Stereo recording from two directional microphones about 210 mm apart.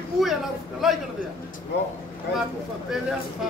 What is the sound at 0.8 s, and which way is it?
Speech, centre (ahead or behind).